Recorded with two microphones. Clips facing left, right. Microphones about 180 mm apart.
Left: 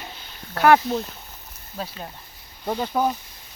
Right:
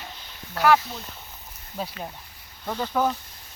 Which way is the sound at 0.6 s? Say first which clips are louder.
Left 4 dB; 55° left (ahead or behind).